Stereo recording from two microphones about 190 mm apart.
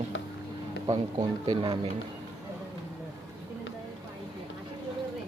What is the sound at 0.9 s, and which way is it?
Speech, 25° right (ahead or behind).